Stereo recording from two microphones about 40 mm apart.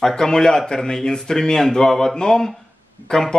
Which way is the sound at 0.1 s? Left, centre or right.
Centre.